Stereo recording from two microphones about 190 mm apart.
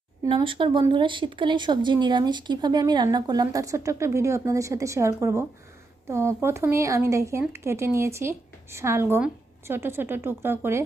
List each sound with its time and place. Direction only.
0.3 s speech: 25° right (ahead or behind)